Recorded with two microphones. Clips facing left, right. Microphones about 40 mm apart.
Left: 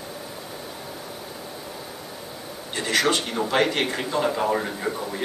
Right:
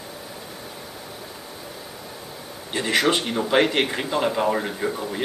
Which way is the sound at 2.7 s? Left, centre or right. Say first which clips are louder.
Right 2 dB; right.